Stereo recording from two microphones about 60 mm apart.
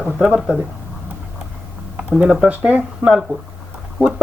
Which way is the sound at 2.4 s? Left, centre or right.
Right.